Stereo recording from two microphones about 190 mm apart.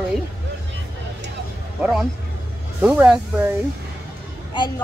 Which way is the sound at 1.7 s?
5° right (ahead or behind).